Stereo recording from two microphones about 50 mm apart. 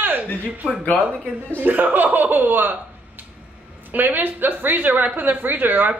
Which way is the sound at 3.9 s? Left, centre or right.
Right.